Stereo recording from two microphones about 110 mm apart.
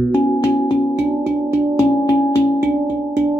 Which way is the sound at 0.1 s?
25° left (ahead or behind).